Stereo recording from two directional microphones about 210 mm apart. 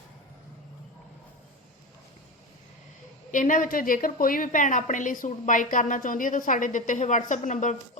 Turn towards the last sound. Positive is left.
turn(degrees=35)  # may be behind; listen again after turning